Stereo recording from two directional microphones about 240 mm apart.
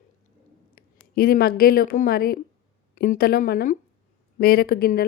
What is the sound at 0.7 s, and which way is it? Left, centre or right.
A woman's voice, left.